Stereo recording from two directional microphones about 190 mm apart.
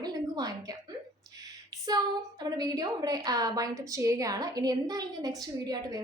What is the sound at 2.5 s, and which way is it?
A woman's voice, 20° right (ahead or behind).